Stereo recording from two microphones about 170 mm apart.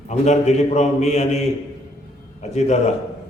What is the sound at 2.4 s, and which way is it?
Speech, 40° left (ahead or behind).